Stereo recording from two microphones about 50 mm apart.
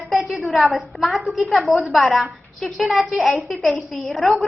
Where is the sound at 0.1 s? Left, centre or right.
Centre.